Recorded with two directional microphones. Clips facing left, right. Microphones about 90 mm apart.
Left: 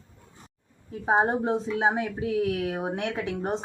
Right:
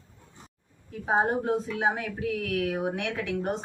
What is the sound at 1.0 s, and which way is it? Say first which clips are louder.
A woman's voice: left 2 dB; 25° left (ahead or behind).